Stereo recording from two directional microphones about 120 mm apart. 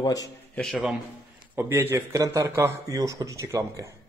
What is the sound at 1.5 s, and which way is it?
A man's voice, 20° right (ahead or behind).